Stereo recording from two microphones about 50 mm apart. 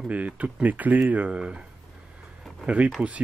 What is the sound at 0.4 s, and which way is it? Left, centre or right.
Speech, right.